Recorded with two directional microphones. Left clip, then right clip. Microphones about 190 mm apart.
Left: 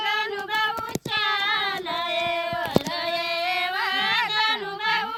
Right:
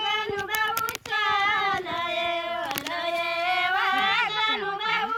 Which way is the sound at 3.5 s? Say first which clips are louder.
Right 4 dB; 30° left (ahead or behind).